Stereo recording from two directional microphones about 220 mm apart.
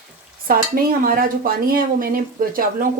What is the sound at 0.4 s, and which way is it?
Speech, 40° right (ahead or behind).